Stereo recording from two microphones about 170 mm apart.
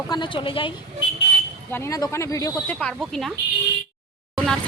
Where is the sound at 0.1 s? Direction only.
30° left (ahead or behind).